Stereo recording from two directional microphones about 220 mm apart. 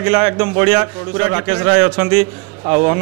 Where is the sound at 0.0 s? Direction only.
10° right (ahead or behind).